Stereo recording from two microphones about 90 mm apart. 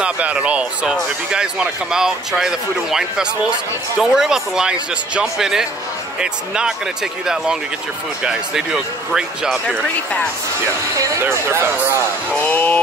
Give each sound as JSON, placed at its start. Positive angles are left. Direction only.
{"t": 0.0, "sound": "speech", "side_deg": -15}
{"t": 8.2, "sound": "speech", "side_deg": -10}
{"t": 11.0, "sound": "speech", "side_deg": -30}
{"t": 12.4, "sound": "a sound", "side_deg": 20}